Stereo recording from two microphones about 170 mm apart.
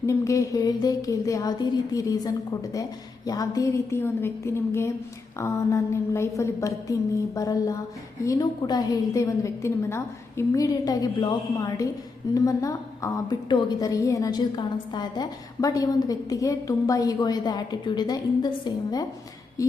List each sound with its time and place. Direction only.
0.0 s a woman's voice: 20° left (ahead or behind)